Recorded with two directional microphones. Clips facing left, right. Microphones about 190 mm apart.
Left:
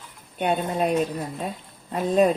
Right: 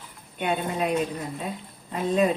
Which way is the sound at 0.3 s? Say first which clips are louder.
Left 3 dB; 40° left (ahead or behind).